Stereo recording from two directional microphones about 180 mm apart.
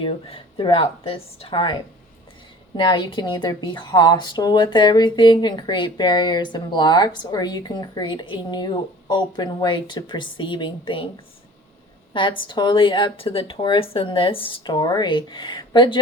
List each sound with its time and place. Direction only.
0.0 s speech: 30° left (ahead or behind)
2.7 s speech: 25° left (ahead or behind)
12.1 s speech: 25° left (ahead or behind)